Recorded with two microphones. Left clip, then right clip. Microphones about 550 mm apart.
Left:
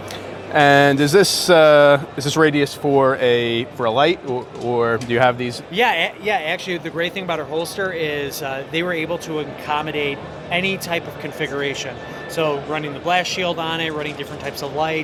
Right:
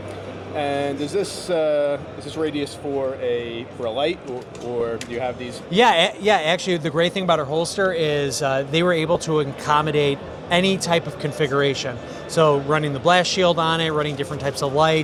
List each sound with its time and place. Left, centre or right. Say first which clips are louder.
0.5 s speech: left 11 dB; left
5.7 s speech: right 2 dB; right